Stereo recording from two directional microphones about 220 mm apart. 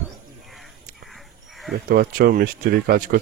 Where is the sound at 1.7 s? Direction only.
40° right (ahead or behind).